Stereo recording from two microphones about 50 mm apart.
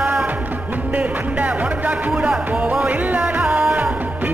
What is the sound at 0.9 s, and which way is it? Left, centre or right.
Music, right.